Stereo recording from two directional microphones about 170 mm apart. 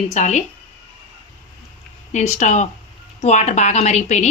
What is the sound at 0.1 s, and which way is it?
Speech, 45° left (ahead or behind).